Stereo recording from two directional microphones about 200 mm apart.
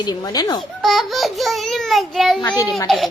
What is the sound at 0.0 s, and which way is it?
Speech, 20° left (ahead or behind).